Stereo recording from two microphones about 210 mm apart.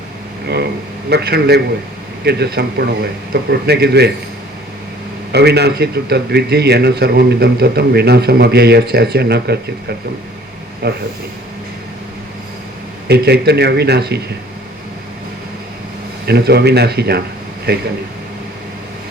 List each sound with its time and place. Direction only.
0.4 s a man's voice: 50° right (ahead or behind)
5.3 s a man's voice: 50° right (ahead or behind)
10.8 s a man's voice: 50° right (ahead or behind)
13.1 s a man's voice: 50° right (ahead or behind)
16.2 s a man's voice: 50° right (ahead or behind)